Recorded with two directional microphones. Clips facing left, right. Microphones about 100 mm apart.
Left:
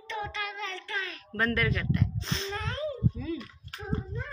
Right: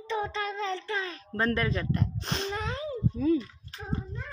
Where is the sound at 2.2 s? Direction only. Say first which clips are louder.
Right 2 dB; 55° right (ahead or behind).